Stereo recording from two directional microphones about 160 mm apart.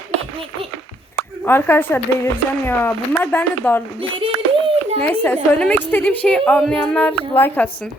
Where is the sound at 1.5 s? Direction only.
15° left (ahead or behind).